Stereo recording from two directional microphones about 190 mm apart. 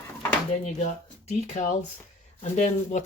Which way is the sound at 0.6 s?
35° left (ahead or behind).